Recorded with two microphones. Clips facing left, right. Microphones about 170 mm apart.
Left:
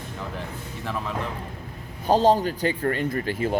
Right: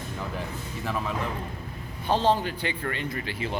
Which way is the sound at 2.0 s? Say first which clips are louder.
Left 5 dB; 40° left (ahead or behind).